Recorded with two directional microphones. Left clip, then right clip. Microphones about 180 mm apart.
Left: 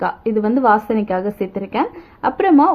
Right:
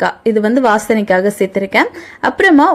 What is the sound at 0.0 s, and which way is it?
A woman's voice, 15° right (ahead or behind).